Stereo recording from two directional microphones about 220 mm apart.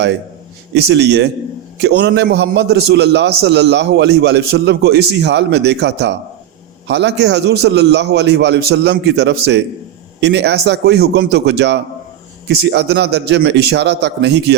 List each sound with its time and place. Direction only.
0.7 s a man's voice: 50° right (ahead or behind)